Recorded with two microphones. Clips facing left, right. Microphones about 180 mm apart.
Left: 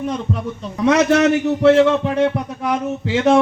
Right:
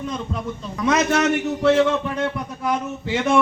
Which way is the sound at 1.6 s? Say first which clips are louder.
Left 5 dB; 65° left (ahead or behind).